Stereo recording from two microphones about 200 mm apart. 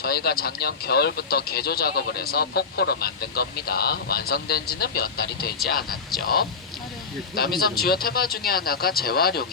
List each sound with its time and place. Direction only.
0.0 s speech: 50° left (ahead or behind)
7.6 s speech: 50° left (ahead or behind)